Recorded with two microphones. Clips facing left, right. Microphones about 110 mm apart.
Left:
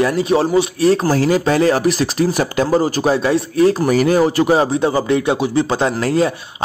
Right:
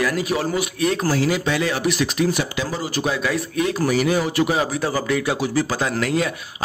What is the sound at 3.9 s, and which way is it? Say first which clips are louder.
A man's voice: left 6 dB; 45° left (ahead or behind).